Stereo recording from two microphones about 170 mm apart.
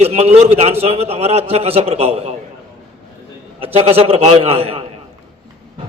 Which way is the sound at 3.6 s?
35° right (ahead or behind).